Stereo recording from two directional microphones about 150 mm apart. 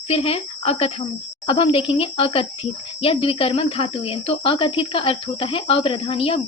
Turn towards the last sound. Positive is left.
turn(degrees=40)  # may be behind; listen again after turning